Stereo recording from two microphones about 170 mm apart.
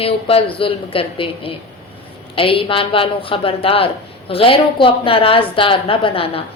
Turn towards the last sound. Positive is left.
turn(degrees=35)  # may be behind; listen again after turning